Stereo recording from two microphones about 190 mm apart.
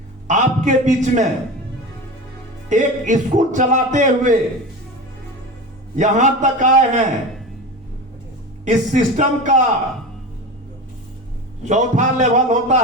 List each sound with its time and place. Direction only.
0.3 s a man's voice: 40° right (ahead or behind)
2.6 s a man's voice: 40° right (ahead or behind)
6.0 s a man's voice: 40° right (ahead or behind)
8.6 s a man's voice: 40° right (ahead or behind)
11.6 s a man's voice: 40° right (ahead or behind)